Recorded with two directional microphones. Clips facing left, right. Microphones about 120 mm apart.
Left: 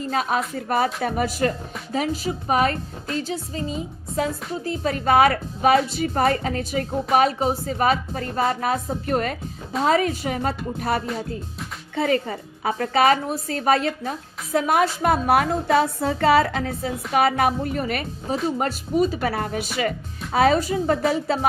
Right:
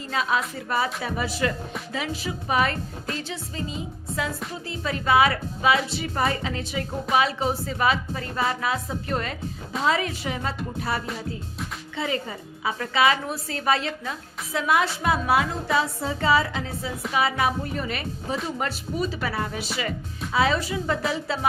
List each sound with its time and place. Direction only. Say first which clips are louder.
0.1 s a woman's voice: left 1 dB; 45° left (ahead or behind)